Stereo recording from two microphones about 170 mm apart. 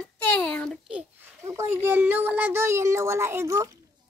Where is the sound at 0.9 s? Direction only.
10° right (ahead or behind).